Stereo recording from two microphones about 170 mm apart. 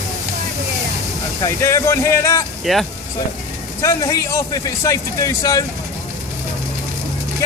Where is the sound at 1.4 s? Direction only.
15° left (ahead or behind).